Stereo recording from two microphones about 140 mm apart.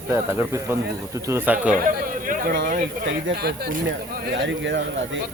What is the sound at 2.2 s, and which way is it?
Speech, 85° right.